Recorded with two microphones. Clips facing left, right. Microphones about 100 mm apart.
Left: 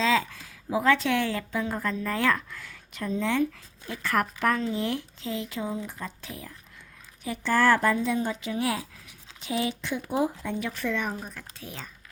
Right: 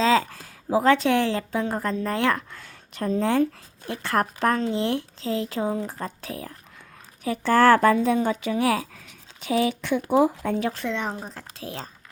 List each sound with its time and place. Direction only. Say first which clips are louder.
0.0 s a sound: right 4 dB; 35° right (ahead or behind)
0.8 s a woman's voice: right 4 dB; 30° right (ahead or behind)
7.3 s a woman's voice: right 5 dB; 50° right (ahead or behind); by 10.5 s 70° right (ahead or behind)
10.6 s a woman's voice: right 6 dB; 35° right (ahead or behind)
10.8 s speech: right 1 dB; 25° right (ahead or behind)